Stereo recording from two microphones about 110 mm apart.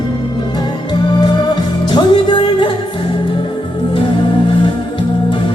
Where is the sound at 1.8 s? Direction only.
40° left (ahead or behind).